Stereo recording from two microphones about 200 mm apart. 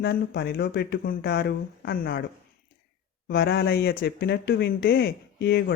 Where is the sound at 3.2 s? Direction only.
55° left (ahead or behind).